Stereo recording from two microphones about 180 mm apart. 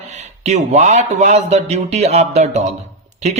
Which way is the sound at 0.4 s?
40° right (ahead or behind).